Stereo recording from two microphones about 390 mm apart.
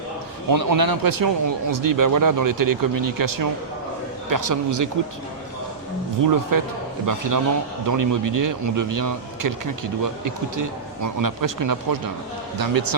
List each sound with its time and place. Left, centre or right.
0.5 s speech: right
6.2 s speech: right